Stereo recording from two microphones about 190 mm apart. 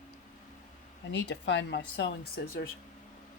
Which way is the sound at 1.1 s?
70° left (ahead or behind).